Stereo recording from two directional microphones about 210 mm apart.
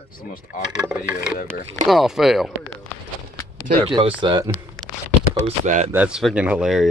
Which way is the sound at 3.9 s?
20° right (ahead or behind).